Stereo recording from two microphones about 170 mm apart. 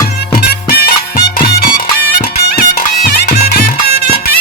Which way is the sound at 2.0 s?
60° left (ahead or behind).